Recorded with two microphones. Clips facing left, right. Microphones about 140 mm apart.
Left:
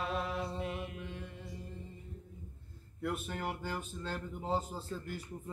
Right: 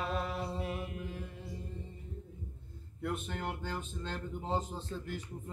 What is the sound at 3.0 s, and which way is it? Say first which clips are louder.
Speech: even; 5° left (ahead or behind).